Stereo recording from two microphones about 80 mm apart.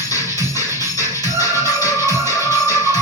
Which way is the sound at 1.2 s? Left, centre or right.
Right.